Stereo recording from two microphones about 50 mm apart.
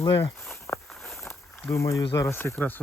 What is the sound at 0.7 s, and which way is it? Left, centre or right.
Walk, left.